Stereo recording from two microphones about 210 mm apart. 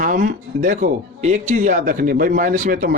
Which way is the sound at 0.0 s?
40° right (ahead or behind).